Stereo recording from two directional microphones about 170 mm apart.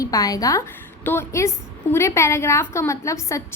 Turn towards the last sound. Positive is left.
turn(degrees=15)  # may be behind; listen again after turning